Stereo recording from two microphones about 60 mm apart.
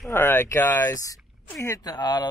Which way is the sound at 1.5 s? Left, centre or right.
Left.